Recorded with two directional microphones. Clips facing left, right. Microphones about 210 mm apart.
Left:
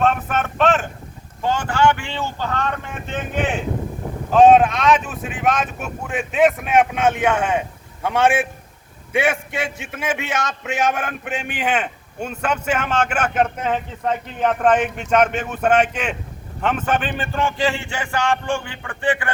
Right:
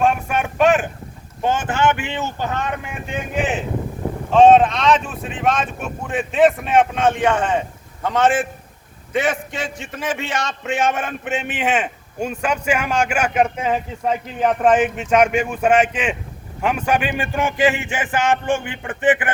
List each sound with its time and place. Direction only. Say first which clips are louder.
0.0 s a sound: right 1 dB; 10° right (ahead or behind)
1.4 s a man's voice: even; 20° right (ahead or behind); by 8.4 s 10° left (ahead or behind)
9.8 s a man's voice: even; 5° left (ahead or behind); by 19.3 s 20° right (ahead or behind)